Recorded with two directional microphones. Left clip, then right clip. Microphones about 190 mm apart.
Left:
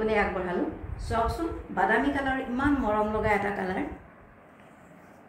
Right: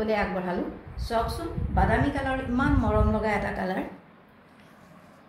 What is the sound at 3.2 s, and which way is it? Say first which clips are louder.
Speech: left 1 dB; 60° right (ahead or behind).